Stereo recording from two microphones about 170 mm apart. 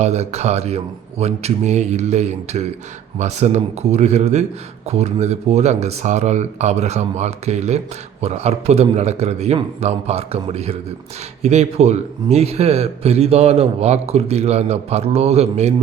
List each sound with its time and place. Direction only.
0.0 s a man's voice: 40° right (ahead or behind)